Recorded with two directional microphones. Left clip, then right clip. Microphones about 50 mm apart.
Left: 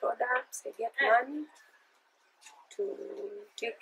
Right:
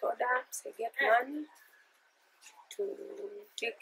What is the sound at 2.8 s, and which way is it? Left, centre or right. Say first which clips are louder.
Speech: left 2 dB; centre.